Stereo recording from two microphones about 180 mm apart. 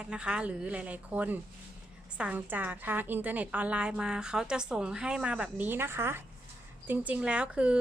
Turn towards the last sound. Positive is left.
turn(degrees=-5)  # may be behind; listen again after turning